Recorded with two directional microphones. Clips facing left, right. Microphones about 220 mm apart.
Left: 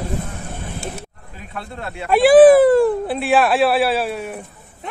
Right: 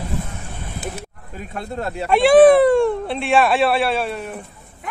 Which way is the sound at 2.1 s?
5° left (ahead or behind).